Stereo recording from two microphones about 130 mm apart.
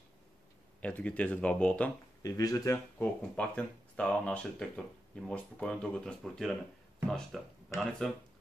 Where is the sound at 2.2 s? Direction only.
30° left (ahead or behind).